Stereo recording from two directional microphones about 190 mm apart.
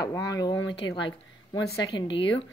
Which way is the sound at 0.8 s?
90° left.